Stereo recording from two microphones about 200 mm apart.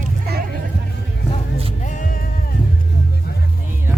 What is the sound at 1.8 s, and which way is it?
Music, 40° left (ahead or behind).